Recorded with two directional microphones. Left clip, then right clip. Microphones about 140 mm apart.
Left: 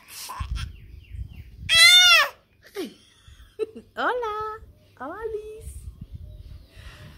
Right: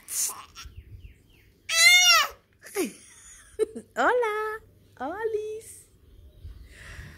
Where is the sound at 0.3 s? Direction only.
15° left (ahead or behind).